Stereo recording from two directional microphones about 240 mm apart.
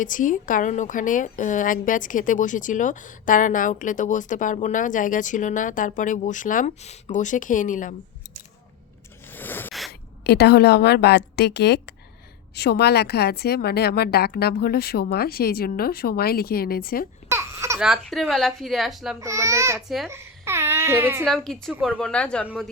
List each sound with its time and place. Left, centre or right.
0.0 s a woman's voice: left
9.2 s scrape: centre
10.2 s a woman's voice: left
17.2 s a sound: centre
17.8 s speech: centre
19.2 s a child's voice: centre
21.2 s speech: centre